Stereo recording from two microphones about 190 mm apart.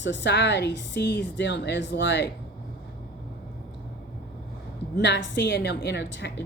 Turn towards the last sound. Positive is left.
turn(degrees=65)  # may be behind; listen again after turning